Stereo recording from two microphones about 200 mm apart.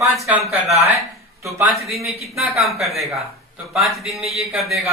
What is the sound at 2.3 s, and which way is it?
Speech, centre (ahead or behind).